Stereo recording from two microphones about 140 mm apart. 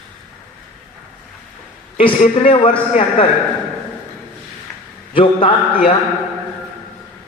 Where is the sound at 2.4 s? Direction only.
40° left (ahead or behind).